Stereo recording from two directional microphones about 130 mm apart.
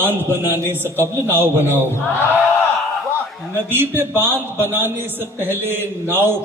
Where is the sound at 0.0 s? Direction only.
15° right (ahead or behind).